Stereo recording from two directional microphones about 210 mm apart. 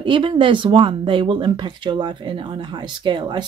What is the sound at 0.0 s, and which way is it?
Speech, 25° right (ahead or behind).